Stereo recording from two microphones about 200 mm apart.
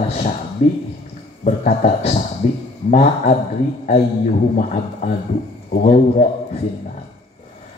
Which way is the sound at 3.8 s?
40° left (ahead or behind).